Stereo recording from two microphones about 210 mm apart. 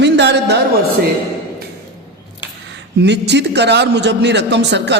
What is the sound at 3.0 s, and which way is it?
A man's voice, 55° right (ahead or behind).